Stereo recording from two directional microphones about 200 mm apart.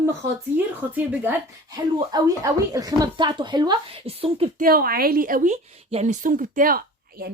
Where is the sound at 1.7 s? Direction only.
20° right (ahead or behind).